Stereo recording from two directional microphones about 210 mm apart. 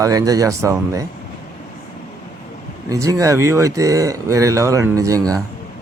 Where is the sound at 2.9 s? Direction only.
15° right (ahead or behind).